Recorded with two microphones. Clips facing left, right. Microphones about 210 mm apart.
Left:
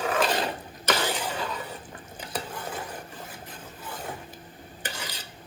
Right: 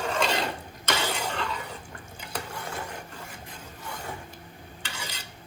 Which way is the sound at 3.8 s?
5° left (ahead or behind).